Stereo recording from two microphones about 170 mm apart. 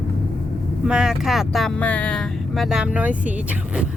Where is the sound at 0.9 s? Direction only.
5° right (ahead or behind).